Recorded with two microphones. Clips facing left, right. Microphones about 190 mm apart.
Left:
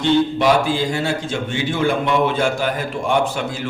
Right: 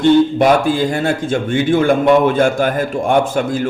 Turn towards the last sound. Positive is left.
turn(degrees=-50)  # may be behind; listen again after turning